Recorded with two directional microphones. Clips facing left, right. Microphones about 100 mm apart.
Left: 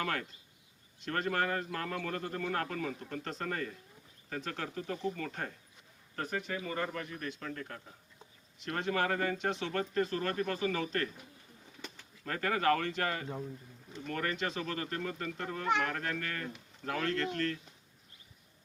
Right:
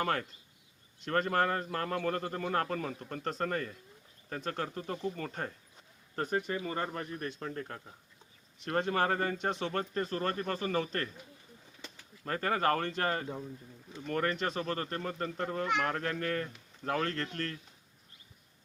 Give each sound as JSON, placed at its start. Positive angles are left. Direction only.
{"t": 0.0, "sound": "a man's voice", "side_deg": -35}
{"t": 12.2, "sound": "a man's voice", "side_deg": -35}
{"t": 15.6, "sound": "speech", "side_deg": 35}
{"t": 15.9, "sound": "a man's voice", "side_deg": -40}